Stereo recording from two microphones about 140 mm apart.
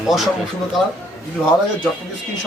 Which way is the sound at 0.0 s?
Centre (ahead or behind).